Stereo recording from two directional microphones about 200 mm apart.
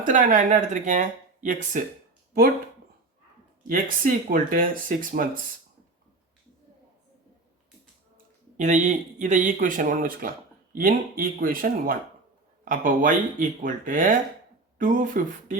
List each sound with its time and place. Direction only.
0.0 s speech: 40° right (ahead or behind)
3.7 s speech: 45° right (ahead or behind)
8.5 s speech: 35° right (ahead or behind)